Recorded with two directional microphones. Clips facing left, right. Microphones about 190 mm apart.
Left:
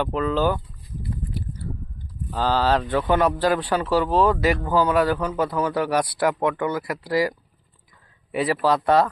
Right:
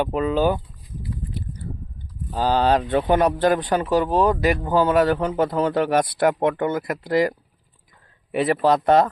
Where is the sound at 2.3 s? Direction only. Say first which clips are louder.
Right 2 dB; 15° right (ahead or behind).